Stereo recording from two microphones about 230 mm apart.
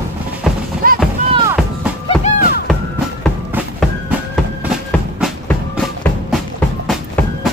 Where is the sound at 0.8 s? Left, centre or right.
Right.